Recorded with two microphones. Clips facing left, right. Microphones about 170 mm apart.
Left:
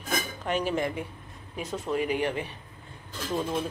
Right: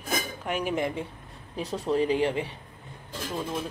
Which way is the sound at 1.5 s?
35° right (ahead or behind).